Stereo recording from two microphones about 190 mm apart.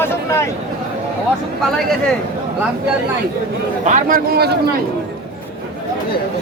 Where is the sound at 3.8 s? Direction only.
45° right (ahead or behind).